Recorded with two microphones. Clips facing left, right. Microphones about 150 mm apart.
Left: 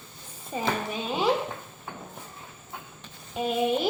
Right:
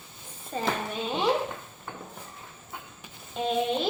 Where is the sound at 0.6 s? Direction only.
5° left (ahead or behind).